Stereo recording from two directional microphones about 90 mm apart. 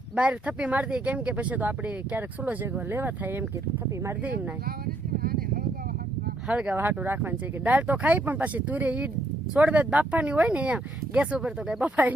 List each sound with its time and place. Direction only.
0.2 s speech: 15° right (ahead or behind)
6.5 s speech: 15° right (ahead or behind)
6.7 s speech: 25° right (ahead or behind)